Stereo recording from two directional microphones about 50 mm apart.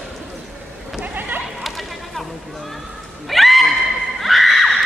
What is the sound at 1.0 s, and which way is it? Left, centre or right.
Sheep, right.